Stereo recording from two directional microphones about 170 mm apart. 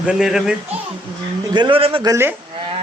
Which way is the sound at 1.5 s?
25° right (ahead or behind).